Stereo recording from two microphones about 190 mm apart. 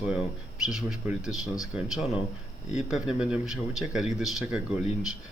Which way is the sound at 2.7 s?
5° right (ahead or behind).